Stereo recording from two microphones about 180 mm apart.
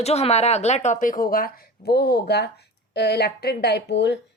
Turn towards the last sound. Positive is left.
turn(degrees=75)  # may be behind; listen again after turning